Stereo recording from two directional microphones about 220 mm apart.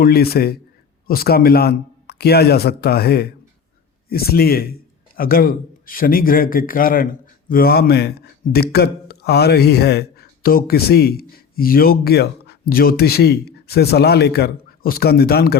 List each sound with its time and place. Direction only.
0.0 s a man's voice: 45° left (ahead or behind)